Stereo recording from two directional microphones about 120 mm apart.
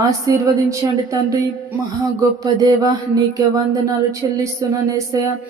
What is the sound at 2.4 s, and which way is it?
Mantra, 30° right (ahead or behind).